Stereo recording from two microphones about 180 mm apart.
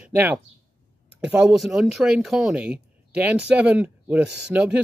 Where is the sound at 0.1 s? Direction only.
10° right (ahead or behind).